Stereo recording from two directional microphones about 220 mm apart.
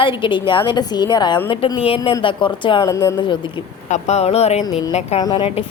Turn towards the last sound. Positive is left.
turn(degrees=25)  # may be behind; listen again after turning